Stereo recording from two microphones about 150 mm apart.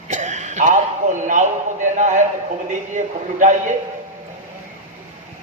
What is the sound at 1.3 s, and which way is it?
Speech, 55° right (ahead or behind).